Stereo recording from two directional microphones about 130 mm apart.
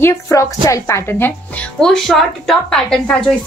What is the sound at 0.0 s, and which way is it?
A woman's voice, 25° left (ahead or behind).